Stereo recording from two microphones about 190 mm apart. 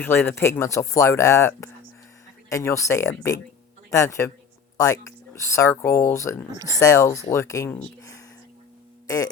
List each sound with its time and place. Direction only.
0.0 s a man's voice: 10° left (ahead or behind)